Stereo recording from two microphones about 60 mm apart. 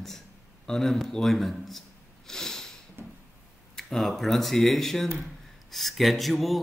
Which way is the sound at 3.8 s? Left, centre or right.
Centre.